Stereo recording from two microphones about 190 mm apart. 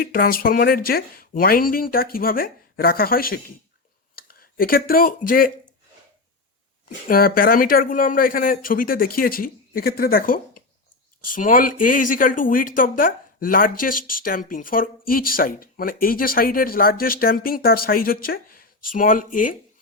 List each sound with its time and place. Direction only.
0.0 s speech: 50° left (ahead or behind)
6.8 s speech: 50° left (ahead or behind)